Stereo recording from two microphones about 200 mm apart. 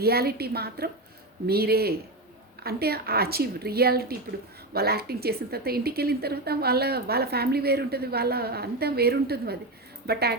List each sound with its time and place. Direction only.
0.0 s a woman's voice: 50° right (ahead or behind)